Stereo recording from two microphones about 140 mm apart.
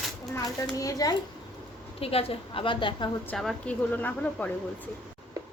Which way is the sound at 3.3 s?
5° left (ahead or behind).